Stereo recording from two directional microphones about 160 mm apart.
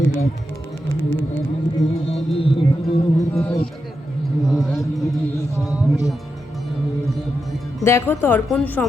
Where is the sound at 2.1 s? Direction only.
35° left (ahead or behind).